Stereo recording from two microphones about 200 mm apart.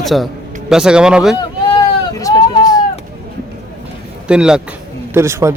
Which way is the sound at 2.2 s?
20° left (ahead or behind).